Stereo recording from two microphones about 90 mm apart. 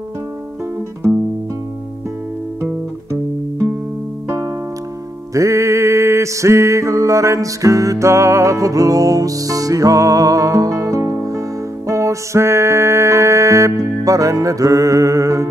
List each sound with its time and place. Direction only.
1.0 s music: 5° right (ahead or behind)
2.6 s guitar: 35° right (ahead or behind)
4.3 s music: 35° right (ahead or behind)